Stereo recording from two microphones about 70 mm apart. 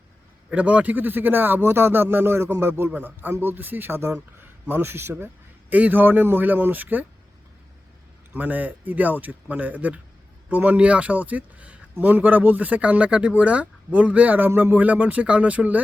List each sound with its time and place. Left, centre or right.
0.5 s a man's voice: centre
8.4 s speech: right